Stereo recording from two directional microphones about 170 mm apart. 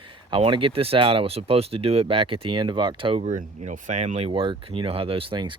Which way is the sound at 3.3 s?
50° right (ahead or behind).